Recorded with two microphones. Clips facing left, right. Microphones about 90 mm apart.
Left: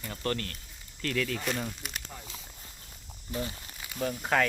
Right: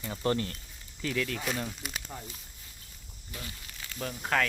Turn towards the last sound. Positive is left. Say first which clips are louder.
# left 2 dB
turn(degrees=5)  # may be behind; listen again after turning